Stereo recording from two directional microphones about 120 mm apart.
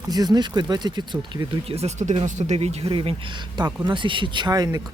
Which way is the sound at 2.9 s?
50° right (ahead or behind).